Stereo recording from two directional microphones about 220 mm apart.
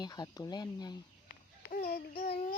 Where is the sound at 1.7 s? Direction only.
40° left (ahead or behind).